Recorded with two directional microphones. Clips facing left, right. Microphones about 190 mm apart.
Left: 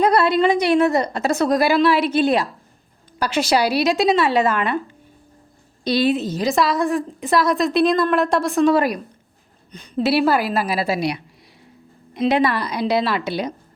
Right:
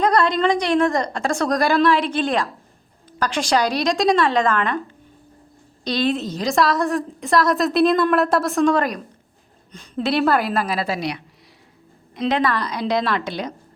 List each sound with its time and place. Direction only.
0.0 s a woman's voice: 5° left (ahead or behind)
5.8 s a woman's voice: 10° left (ahead or behind)